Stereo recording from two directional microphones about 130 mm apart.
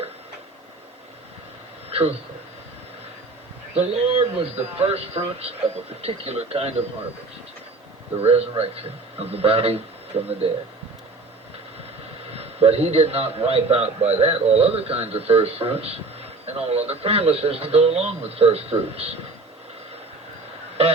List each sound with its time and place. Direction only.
1.9 s a sound: 50° right (ahead or behind)
3.8 s a man's voice: 50° right (ahead or behind)
8.2 s a man's voice: 50° right (ahead or behind)
12.3 s a man's voice: 50° right (ahead or behind)